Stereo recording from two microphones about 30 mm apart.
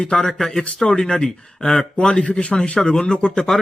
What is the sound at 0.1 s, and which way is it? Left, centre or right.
Speech, left.